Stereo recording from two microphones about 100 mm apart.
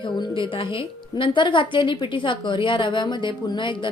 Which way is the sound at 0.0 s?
55° left (ahead or behind).